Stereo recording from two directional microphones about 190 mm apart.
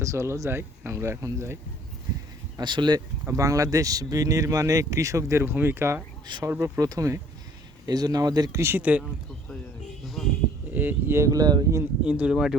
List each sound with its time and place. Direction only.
0.0 s speech: 15° right (ahead or behind)
2.6 s speech: 25° right (ahead or behind); by 9.0 s 5° right (ahead or behind)
10.2 s a sound: centre (ahead or behind)
10.7 s speech: 10° right (ahead or behind)
12.0 s speech: 5° right (ahead or behind)